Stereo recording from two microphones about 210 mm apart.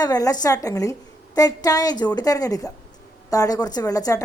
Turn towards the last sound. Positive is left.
turn(degrees=15)  # may be behind; listen again after turning